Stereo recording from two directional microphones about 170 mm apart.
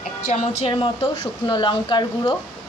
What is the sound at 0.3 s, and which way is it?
Speech, 35° left (ahead or behind).